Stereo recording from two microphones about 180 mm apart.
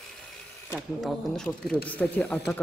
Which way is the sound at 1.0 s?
5° left (ahead or behind).